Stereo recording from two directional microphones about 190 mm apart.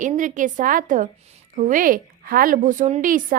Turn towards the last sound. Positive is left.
turn(degrees=-45)  # may be behind; listen again after turning